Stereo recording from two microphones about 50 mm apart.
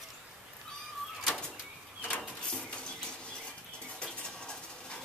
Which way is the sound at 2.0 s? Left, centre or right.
Left.